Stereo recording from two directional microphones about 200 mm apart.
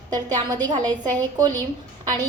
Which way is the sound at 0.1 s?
20° right (ahead or behind).